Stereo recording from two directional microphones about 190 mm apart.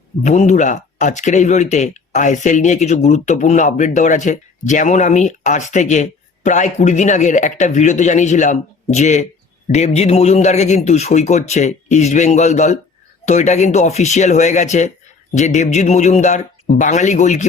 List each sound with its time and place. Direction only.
0.3 s speech: 40° left (ahead or behind)